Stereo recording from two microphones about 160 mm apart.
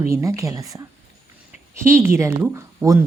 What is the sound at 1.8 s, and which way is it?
A woman's voice, 15° right (ahead or behind).